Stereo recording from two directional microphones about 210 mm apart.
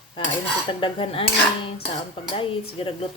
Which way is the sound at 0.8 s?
25° left (ahead or behind).